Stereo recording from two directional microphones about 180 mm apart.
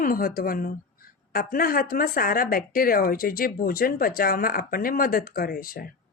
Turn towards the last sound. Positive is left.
turn(degrees=55)  # may be behind; listen again after turning